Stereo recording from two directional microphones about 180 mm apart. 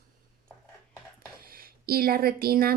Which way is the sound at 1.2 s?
55° right (ahead or behind).